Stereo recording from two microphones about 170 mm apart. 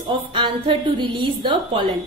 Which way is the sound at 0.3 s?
30° right (ahead or behind).